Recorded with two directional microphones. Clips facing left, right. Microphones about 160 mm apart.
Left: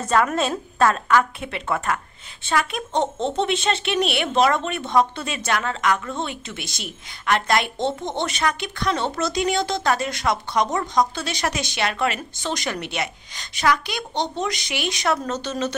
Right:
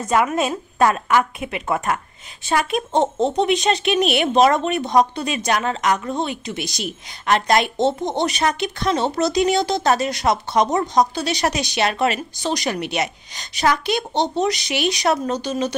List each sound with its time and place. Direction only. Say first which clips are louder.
0.0 s speech: right 1 dB; 15° right (ahead or behind)
2.9 s speech: right 4 dB; 45° right (ahead or behind)
3.3 s speech: right 2 dB; 15° right (ahead or behind)
6.6 s a woman's voice: right 7 dB; 20° left (ahead or behind)
7.2 s a woman's voice: right 3 dB; 20° right (ahead or behind)